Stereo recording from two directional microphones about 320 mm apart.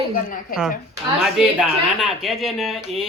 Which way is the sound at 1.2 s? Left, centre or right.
Centre.